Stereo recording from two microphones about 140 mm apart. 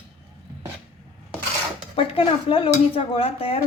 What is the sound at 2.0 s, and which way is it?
A woman's voice, 40° left (ahead or behind).